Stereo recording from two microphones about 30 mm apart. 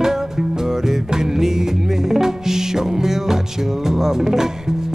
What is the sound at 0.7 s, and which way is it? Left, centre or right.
Music, centre.